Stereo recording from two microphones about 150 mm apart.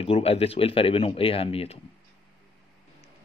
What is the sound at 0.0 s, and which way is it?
Speech, 40° left (ahead or behind).